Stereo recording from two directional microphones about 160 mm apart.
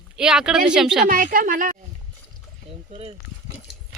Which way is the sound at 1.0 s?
55° right (ahead or behind).